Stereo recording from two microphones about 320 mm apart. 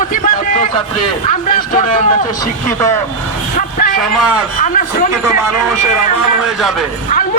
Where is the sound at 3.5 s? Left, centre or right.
Left.